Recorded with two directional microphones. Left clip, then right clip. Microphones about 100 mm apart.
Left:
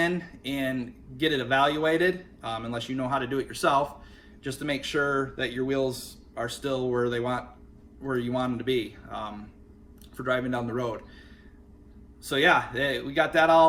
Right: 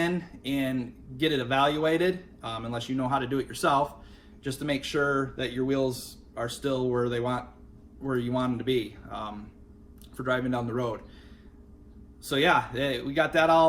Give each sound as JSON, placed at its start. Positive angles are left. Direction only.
{"t": 0.0, "sound": "speech", "side_deg": 15}
{"t": 12.2, "sound": "speech", "side_deg": 15}